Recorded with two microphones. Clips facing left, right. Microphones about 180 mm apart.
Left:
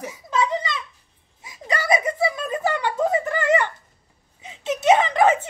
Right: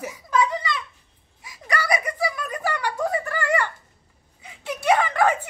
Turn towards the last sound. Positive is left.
turn(degrees=20)  # may be behind; listen again after turning